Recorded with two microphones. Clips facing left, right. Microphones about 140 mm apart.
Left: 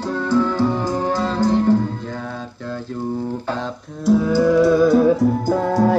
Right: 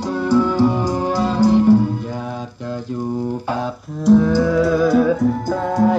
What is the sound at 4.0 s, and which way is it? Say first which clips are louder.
Music: right 2 dB; 10° left (ahead or behind).